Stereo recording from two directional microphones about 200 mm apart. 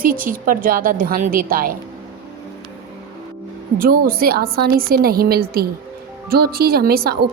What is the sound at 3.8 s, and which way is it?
A woman's voice, 50° right (ahead or behind).